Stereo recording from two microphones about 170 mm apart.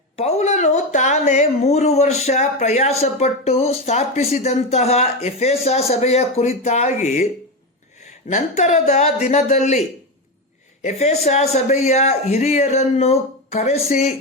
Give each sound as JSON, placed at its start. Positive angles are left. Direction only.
{"t": 0.2, "sound": "speech", "side_deg": 40}
{"t": 8.3, "sound": "speech", "side_deg": 45}
{"t": 10.8, "sound": "speech", "side_deg": 40}